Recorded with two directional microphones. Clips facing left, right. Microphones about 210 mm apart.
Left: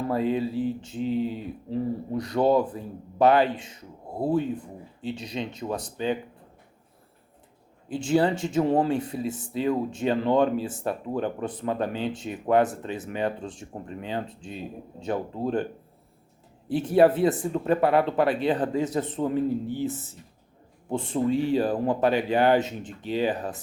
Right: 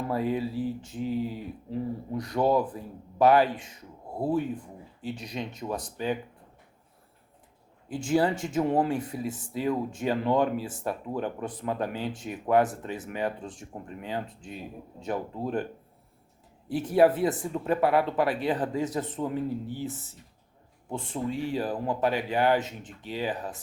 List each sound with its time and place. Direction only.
0.1 s speech: 25° left (ahead or behind)
7.9 s speech: 25° left (ahead or behind)
16.6 s speech: 25° left (ahead or behind)
20.9 s speech: 25° left (ahead or behind)